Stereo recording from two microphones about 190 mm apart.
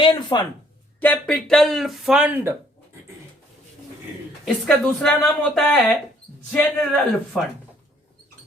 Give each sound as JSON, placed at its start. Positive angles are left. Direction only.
{"t": 0.0, "sound": "a sound", "side_deg": 25}
{"t": 0.9, "sound": "speech", "side_deg": 10}
{"t": 4.4, "sound": "a man's voice", "side_deg": 5}